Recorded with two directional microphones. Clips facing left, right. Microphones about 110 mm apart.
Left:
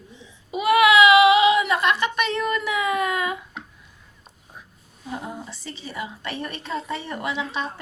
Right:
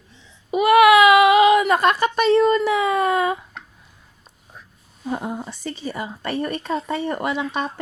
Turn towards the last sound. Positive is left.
turn(degrees=-50)  # may be behind; listen again after turning